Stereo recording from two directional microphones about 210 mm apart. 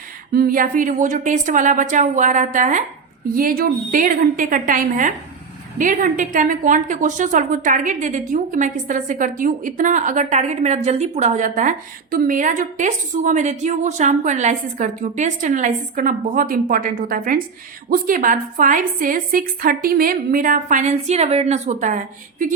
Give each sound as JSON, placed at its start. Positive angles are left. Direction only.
{"t": 0.3, "sound": "a woman's voice", "side_deg": -40}